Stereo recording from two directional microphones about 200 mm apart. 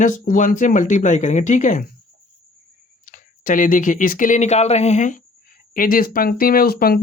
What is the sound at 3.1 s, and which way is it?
Speech, 40° left (ahead or behind).